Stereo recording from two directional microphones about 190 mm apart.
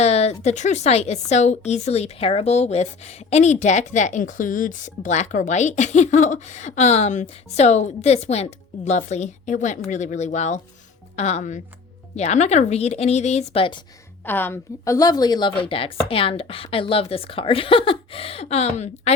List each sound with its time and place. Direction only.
0.0 s a woman's voice: 35° left (ahead or behind)
14.3 s a woman's voice: 10° left (ahead or behind); by 19.1 s 35° left (ahead or behind)